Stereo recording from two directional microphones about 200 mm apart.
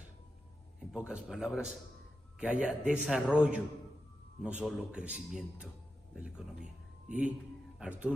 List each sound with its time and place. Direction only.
0.9 s a man's voice: 5° right (ahead or behind)
7.8 s a man's voice: 5° right (ahead or behind)